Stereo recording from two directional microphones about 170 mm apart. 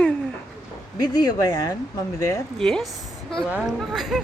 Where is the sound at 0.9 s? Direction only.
25° left (ahead or behind).